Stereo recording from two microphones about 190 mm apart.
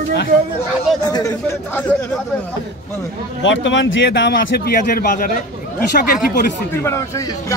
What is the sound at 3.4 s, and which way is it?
Speech, 75° left (ahead or behind).